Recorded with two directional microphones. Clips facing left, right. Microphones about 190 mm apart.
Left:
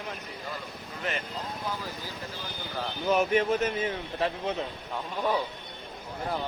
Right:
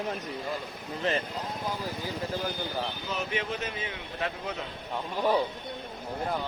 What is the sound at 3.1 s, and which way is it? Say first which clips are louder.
Speech: left 12 dB; 50° left (ahead or behind).